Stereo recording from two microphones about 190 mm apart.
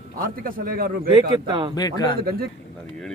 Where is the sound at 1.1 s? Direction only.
25° right (ahead or behind).